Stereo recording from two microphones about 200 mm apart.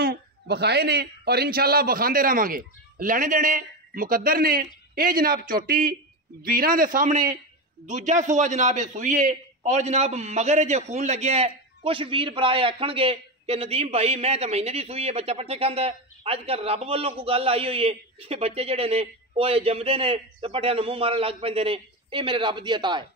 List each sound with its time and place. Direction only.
0.0 s a man's voice: 55° right (ahead or behind); by 23.0 s 20° right (ahead or behind)